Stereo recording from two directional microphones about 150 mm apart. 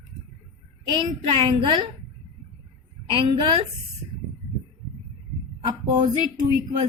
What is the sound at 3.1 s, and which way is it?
Speech, 35° right (ahead or behind).